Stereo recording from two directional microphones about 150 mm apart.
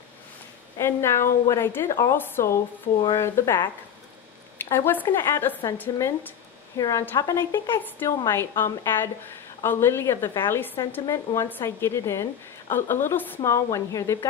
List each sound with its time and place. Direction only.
0.7 s a woman's voice: 15° left (ahead or behind)